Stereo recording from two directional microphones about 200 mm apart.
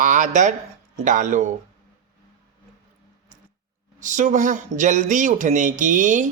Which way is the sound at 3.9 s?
40° right (ahead or behind).